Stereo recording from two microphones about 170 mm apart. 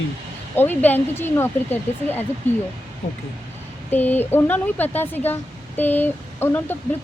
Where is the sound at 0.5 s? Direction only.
10° left (ahead or behind).